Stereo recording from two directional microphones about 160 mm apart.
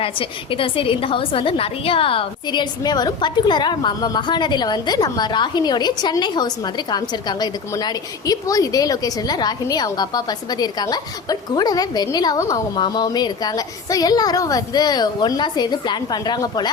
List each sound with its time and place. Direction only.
0.0 s a woman's voice: 35° left (ahead or behind)